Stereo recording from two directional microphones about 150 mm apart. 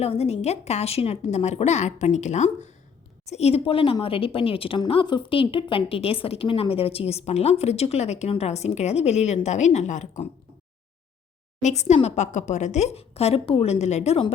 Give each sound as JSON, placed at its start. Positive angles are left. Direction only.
{"t": 0.0, "sound": "a woman's voice", "side_deg": 45}
{"t": 11.6, "sound": "a woman's voice", "side_deg": 50}